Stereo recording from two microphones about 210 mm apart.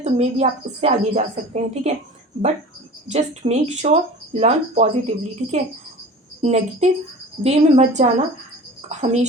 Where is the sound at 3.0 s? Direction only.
30° right (ahead or behind).